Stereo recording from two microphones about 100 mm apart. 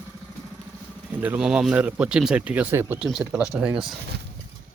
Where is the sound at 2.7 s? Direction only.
25° right (ahead or behind).